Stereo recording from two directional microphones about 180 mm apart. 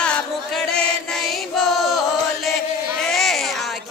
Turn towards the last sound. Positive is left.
turn(degrees=0)  # may be behind; listen again after turning